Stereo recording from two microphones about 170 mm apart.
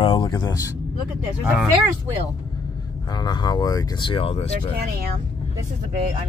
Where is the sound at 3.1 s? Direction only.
25° left (ahead or behind).